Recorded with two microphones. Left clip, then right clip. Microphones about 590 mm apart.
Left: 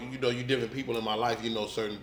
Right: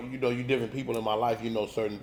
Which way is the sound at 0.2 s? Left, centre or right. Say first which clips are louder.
Right 1 dB; right.